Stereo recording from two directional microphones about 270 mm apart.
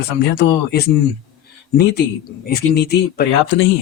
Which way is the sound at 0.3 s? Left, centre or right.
Left.